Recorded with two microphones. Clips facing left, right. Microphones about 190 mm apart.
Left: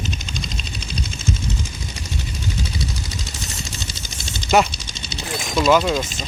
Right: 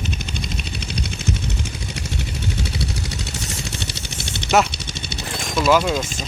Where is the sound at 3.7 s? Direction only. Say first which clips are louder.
Right 3 dB; 70° right (ahead or behind).